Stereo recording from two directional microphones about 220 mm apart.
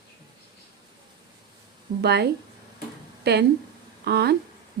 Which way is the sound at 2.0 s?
50° right (ahead or behind).